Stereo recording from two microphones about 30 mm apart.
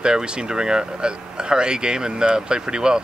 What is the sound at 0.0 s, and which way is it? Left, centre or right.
Speech, right.